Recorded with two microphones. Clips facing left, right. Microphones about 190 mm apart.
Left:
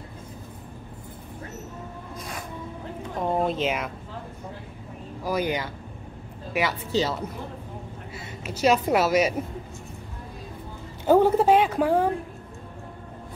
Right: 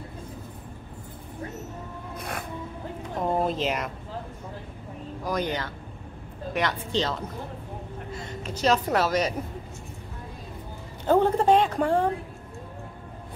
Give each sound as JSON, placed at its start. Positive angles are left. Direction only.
{"t": 2.1, "sound": "music", "side_deg": -60}
{"t": 3.2, "sound": "a sound", "side_deg": 0}
{"t": 5.2, "sound": "a woman's voice", "side_deg": 10}
{"t": 11.1, "sound": "a woman's voice", "side_deg": 5}